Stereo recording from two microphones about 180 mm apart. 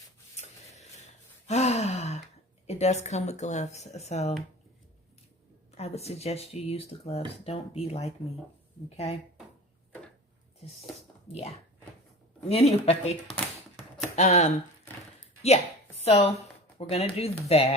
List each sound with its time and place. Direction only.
1.5 s gasp: 40° left (ahead or behind)
2.6 s speech: 40° left (ahead or behind)
5.7 s speech: 35° left (ahead or behind)
12.5 s a woman's voice: 35° left (ahead or behind)